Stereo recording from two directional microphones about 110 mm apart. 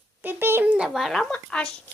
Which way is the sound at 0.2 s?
20° right (ahead or behind).